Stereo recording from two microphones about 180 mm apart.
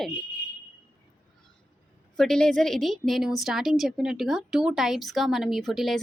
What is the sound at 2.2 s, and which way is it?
A woman's voice, 5° left (ahead or behind).